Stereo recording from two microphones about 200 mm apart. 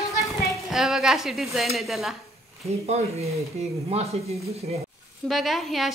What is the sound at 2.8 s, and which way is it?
Speech, 30° right (ahead or behind).